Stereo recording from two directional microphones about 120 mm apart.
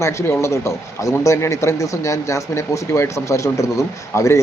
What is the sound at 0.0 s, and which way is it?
Speech, 25° left (ahead or behind).